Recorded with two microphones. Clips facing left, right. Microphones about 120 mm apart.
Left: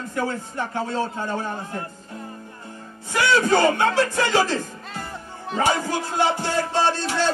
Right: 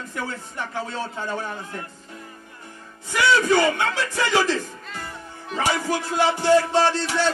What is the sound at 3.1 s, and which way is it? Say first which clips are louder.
Music: even; 40° left (ahead or behind).